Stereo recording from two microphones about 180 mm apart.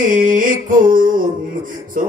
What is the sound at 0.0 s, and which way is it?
Music, 50° right (ahead or behind).